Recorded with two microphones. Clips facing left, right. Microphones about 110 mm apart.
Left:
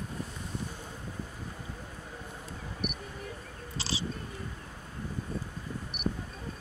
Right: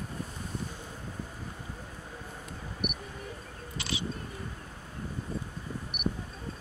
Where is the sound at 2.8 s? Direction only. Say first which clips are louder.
Right 1 dB; 30° left (ahead or behind).